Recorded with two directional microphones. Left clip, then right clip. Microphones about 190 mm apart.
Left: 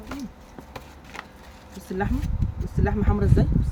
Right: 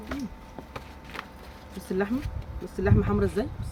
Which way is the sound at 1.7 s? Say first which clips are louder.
Even; 15° left (ahead or behind).